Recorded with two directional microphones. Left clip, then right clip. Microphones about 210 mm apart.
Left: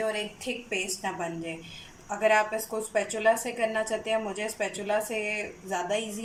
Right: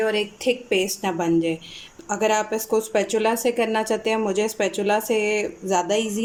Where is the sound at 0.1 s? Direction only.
50° right (ahead or behind).